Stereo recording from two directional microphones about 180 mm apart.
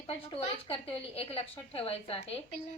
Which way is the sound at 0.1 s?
30° left (ahead or behind).